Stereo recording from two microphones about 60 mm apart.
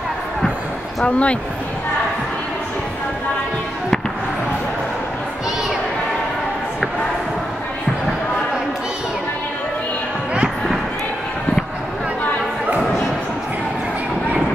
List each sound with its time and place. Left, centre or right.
1.0 s speech: centre